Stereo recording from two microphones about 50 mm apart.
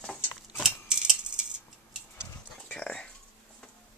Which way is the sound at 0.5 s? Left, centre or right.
Centre.